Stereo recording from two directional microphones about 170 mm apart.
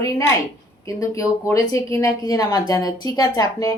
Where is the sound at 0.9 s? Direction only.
20° left (ahead or behind).